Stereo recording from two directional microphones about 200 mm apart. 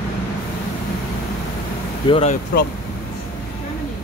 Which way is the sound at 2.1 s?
30° left (ahead or behind).